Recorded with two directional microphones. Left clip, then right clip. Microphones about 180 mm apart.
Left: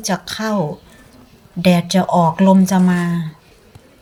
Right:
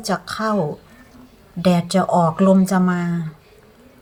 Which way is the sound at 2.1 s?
30° left (ahead or behind).